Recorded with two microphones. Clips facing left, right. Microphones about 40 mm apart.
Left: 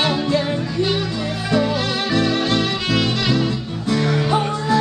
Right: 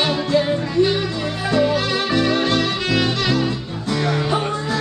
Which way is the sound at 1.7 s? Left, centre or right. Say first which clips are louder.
Right 1 dB; centre.